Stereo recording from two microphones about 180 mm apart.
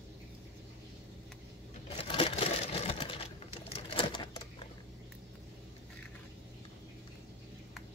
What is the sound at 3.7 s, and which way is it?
Typewriter, 30° left (ahead or behind).